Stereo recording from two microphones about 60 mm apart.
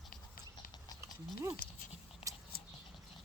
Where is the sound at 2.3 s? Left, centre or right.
Right.